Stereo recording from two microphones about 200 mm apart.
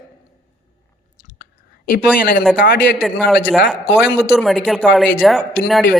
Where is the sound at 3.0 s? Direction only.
Centre (ahead or behind).